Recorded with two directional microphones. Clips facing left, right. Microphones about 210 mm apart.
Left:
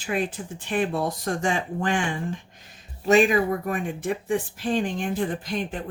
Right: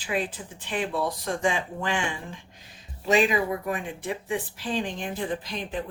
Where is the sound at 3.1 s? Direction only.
45° left (ahead or behind).